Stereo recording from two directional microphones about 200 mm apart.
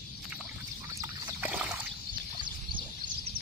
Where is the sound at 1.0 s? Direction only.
10° right (ahead or behind).